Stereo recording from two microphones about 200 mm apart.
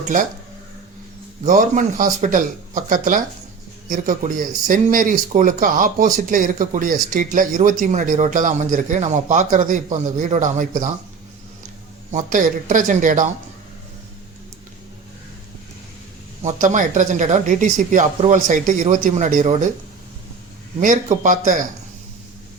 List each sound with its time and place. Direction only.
1.5 s speech: 40° right (ahead or behind)
12.1 s speech: 40° right (ahead or behind)
16.4 s speech: 35° right (ahead or behind)
20.7 s speech: 40° right (ahead or behind)